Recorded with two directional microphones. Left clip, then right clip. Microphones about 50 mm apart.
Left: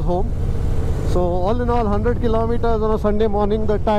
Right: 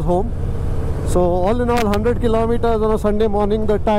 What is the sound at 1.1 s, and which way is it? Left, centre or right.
Speech, right.